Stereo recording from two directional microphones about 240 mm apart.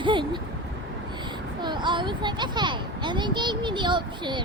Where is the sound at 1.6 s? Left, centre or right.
Centre.